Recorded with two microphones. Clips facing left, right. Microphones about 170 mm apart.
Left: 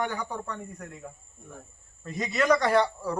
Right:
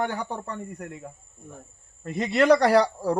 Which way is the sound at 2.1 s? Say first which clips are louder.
Right 5 dB; 60° right (ahead or behind).